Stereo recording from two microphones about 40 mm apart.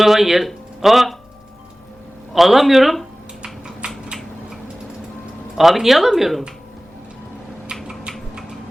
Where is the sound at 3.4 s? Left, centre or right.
Right.